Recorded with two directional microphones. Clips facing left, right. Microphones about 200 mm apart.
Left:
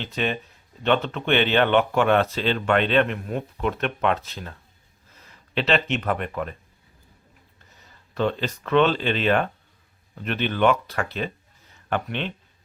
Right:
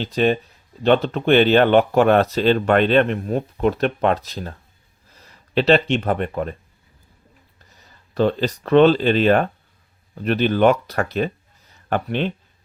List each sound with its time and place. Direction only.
0.0 s speech: 35° right (ahead or behind)
8.1 s speech: 35° right (ahead or behind)